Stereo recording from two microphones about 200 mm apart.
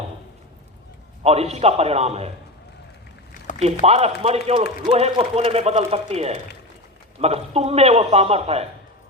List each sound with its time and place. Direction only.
1.2 s speech: 30° right (ahead or behind)
3.6 s speech: 30° right (ahead or behind)